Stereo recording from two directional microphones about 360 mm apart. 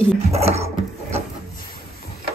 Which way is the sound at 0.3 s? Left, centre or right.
Centre.